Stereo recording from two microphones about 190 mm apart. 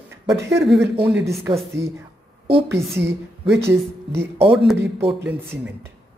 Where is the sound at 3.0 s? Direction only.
15° right (ahead or behind).